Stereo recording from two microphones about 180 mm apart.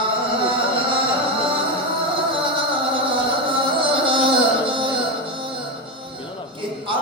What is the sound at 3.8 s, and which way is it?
Music, 30° right (ahead or behind).